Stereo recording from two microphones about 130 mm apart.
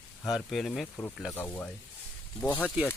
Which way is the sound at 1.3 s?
15° left (ahead or behind).